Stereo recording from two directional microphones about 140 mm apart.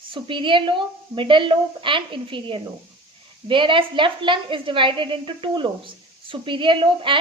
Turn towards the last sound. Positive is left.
turn(degrees=-35)  # may be behind; listen again after turning